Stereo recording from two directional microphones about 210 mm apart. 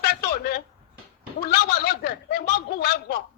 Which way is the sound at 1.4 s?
50° left (ahead or behind).